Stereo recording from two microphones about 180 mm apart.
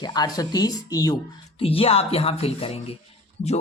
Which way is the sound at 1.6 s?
30° left (ahead or behind).